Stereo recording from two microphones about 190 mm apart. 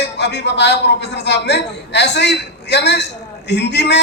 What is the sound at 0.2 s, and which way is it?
A man's voice, 65° left (ahead or behind).